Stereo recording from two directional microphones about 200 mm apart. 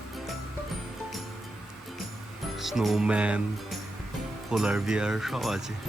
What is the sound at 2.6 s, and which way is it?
Speech, centre (ahead or behind).